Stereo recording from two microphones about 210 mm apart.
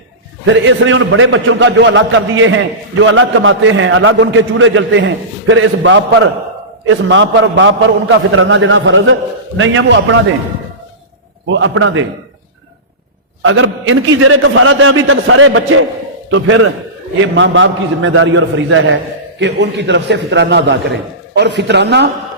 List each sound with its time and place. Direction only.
0.4 s a man's voice: 65° right (ahead or behind)
11.4 s a man's voice: 65° right (ahead or behind)
13.4 s a man's voice: 70° right (ahead or behind)
17.2 s a man's voice: 60° right (ahead or behind)